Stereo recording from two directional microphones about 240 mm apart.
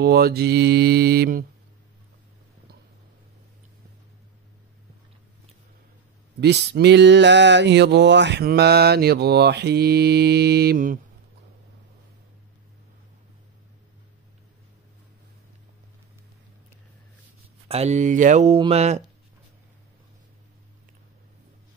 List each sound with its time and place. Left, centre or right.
0.0 s mantra: right
6.4 s a sound: right
17.6 s speech: right